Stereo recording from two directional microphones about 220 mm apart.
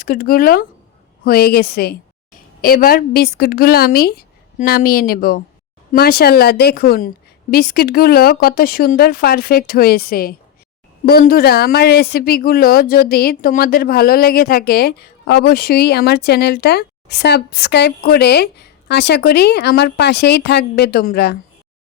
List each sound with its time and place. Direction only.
0.0 s a woman's voice: 40° left (ahead or behind)